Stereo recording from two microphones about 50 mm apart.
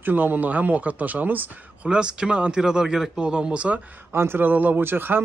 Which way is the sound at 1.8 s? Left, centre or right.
Centre.